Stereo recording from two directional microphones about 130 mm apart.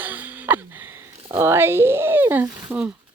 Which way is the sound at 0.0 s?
15° right (ahead or behind).